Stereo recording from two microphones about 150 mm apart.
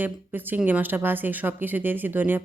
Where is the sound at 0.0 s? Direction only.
15° right (ahead or behind).